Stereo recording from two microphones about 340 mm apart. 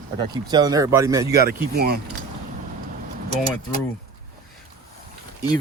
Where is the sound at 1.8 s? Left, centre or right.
Right.